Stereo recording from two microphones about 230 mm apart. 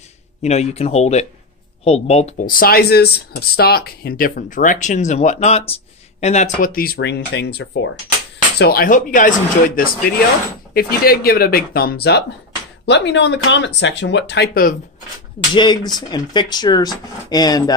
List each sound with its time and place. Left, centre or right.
0.4 s speech: left
15.5 s speech: centre